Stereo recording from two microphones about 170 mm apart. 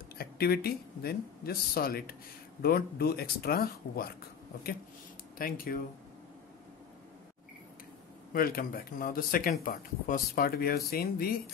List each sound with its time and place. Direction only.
0.2 s speech: 65° left (ahead or behind)
5.4 s speech: 60° left (ahead or behind)
8.3 s speech: 60° left (ahead or behind)